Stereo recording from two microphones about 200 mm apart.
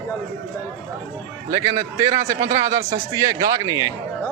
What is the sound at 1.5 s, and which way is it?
A man's voice, 15° right (ahead or behind).